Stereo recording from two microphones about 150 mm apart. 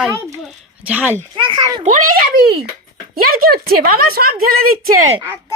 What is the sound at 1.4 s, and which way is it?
Speech, 35° right (ahead or behind).